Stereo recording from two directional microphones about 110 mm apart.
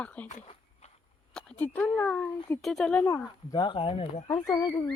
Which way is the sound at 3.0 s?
35° left (ahead or behind).